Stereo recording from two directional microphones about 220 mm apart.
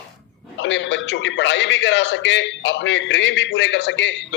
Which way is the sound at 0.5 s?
55° left (ahead or behind).